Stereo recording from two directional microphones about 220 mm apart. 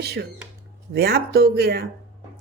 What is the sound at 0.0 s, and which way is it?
Speech, 50° right (ahead or behind).